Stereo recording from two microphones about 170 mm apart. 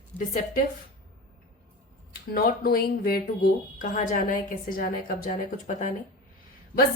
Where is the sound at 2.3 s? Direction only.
65° left (ahead or behind).